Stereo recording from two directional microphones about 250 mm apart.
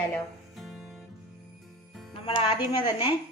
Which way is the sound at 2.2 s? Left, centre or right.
Centre.